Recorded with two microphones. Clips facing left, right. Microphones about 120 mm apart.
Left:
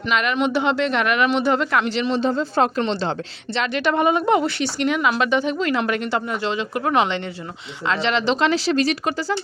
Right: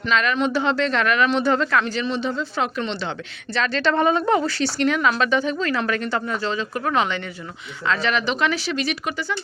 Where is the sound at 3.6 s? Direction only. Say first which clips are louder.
Even; 15° left (ahead or behind).